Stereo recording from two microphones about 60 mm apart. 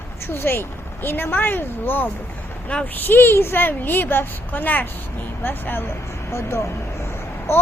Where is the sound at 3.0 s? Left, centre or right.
Left.